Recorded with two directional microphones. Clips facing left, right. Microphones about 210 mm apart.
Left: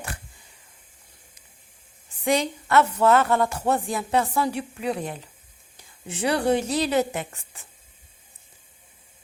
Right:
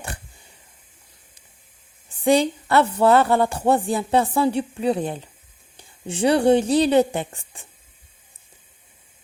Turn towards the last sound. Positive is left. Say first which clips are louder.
# right 4 dB
turn(degrees=-30)  # may be behind; listen again after turning